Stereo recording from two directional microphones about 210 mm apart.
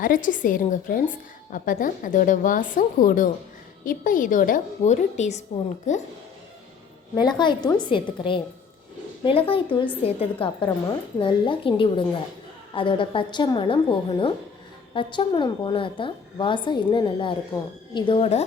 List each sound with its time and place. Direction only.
0.0 s a woman's voice: 40° left (ahead or behind)
7.2 s a woman's voice: 20° left (ahead or behind)